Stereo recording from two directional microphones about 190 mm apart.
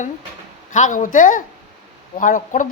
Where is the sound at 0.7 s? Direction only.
40° left (ahead or behind).